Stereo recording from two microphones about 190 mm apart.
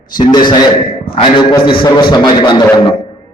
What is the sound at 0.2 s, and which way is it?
A man's voice, 25° left (ahead or behind).